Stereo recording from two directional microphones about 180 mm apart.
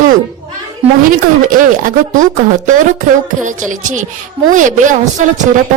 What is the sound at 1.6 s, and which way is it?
A woman's voice, 50° right (ahead or behind).